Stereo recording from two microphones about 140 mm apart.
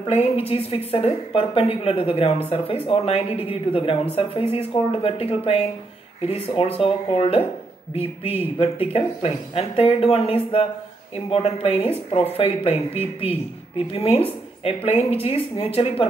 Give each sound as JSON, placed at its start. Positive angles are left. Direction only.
{"t": 0.0, "sound": "a woman's voice", "side_deg": 45}